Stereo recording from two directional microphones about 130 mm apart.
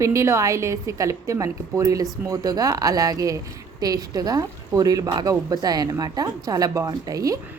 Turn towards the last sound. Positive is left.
turn(degrees=-25)  # may be behind; listen again after turning